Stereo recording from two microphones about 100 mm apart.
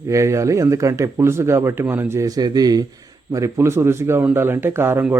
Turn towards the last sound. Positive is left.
turn(degrees=-25)  # may be behind; listen again after turning